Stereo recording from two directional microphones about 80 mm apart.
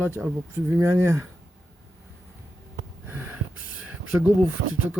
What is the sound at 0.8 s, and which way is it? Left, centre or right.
Speech, right.